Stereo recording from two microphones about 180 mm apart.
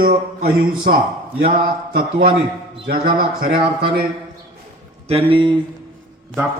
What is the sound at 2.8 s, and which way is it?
Speech, 55° right (ahead or behind).